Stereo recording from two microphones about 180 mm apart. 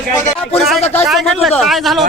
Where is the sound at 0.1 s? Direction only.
30° left (ahead or behind).